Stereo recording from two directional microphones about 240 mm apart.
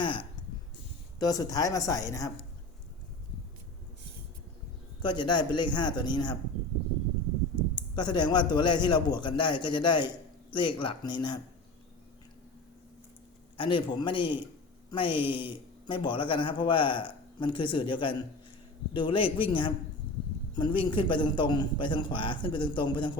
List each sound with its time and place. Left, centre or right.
0.0 s a sound: centre
1.2 s speech: centre
5.0 s speech: centre
7.8 s speech: centre
13.6 s speech: centre